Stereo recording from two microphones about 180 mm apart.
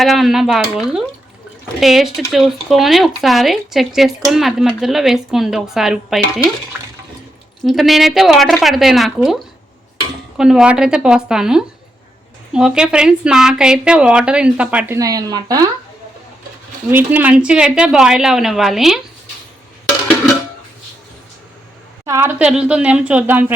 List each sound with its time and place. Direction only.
0.0 s speech: centre (ahead or behind)
1.8 s speech: centre (ahead or behind)
7.6 s speech: centre (ahead or behind)
14.9 s speech: 20° right (ahead or behind)
16.9 s speech: 10° right (ahead or behind)
22.0 s a woman's voice: 15° right (ahead or behind)